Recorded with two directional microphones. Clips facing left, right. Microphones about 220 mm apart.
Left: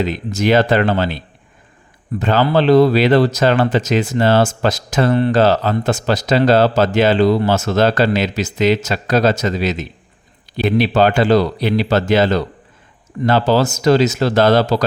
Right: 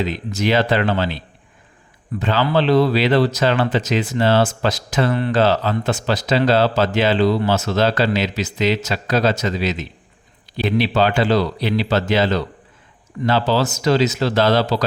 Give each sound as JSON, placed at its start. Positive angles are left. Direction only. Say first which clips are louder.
{"t": 0.1, "sound": "speech", "louder": "left 4 dB", "side_deg": 45}